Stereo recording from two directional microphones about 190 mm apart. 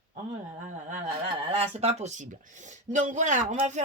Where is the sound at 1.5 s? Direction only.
35° right (ahead or behind).